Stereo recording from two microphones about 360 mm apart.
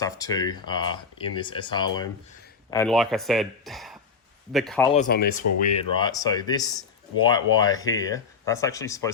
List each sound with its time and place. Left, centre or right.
0.0 s speech: centre
4.9 s speech: left; by 9.1 s centre